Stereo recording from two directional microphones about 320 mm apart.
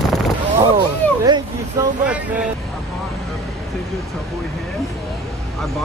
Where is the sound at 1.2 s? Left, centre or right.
Centre.